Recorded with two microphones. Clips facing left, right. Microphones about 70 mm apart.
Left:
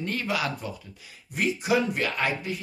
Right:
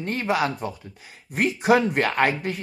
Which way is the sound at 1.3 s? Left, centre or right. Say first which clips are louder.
Right 5 dB; right.